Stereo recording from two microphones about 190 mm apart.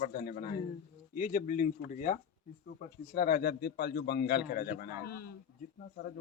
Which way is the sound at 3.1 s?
50° left (ahead or behind).